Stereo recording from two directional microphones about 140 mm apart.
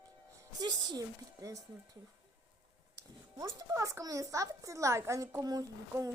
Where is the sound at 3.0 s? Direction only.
25° right (ahead or behind).